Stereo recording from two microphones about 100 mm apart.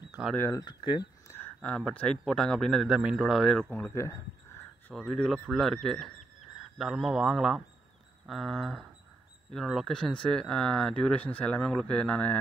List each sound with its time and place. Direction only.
0.2 s speech: 5° right (ahead or behind)
0.6 s speech: 50° left (ahead or behind)
1.4 s speech: 10° left (ahead or behind)
2.9 s speech: 5° right (ahead or behind)
3.9 s speech: 30° left (ahead or behind)
5.1 s speech: 5° left (ahead or behind)